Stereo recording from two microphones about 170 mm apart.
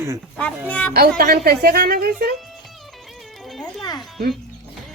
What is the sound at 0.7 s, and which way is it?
Speech, 10° left (ahead or behind).